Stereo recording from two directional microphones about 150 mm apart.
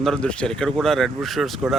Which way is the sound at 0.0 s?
5° left (ahead or behind).